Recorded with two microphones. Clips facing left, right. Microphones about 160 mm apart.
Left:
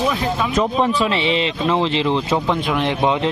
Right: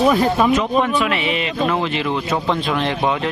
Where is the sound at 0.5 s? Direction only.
35° left (ahead or behind).